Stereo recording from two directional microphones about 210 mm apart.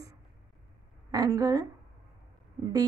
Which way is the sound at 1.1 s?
15° right (ahead or behind).